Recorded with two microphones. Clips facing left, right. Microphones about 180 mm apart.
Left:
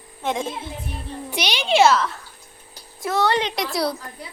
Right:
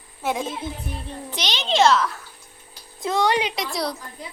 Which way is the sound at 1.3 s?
10° left (ahead or behind).